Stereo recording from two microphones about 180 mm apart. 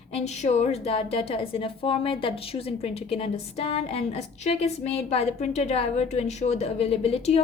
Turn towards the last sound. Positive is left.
turn(degrees=35)  # may be behind; listen again after turning